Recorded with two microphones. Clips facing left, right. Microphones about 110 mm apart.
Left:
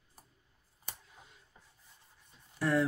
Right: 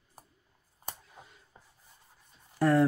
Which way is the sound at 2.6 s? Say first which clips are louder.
Right 6 dB; 50° right (ahead or behind).